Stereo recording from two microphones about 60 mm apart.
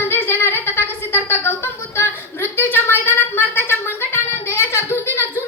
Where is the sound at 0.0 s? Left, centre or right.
Left.